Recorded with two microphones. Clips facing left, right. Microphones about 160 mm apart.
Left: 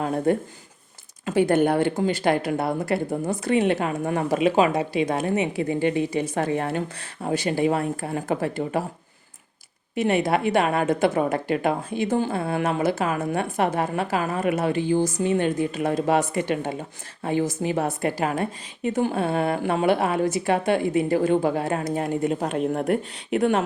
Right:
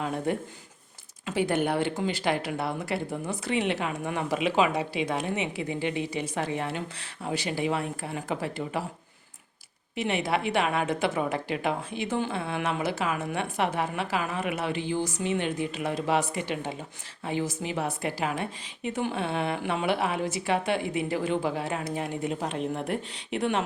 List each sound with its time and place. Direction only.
0.0 s speech: 45° left (ahead or behind)
9.9 s speech: 45° left (ahead or behind)